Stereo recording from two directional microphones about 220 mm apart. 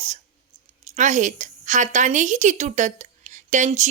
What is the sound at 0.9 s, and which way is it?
A woman's voice, 35° right (ahead or behind).